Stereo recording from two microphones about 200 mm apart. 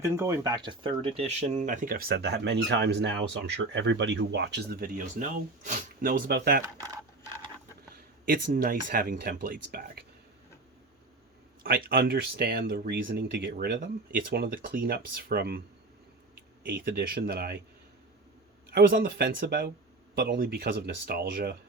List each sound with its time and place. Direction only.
0.0 s speech: 15° right (ahead or behind); by 6.7 s 50° right (ahead or behind)
7.9 s speech: 45° right (ahead or behind)
11.6 s speech: 45° right (ahead or behind)
16.7 s speech: 55° right (ahead or behind)
18.7 s speech: 50° right (ahead or behind)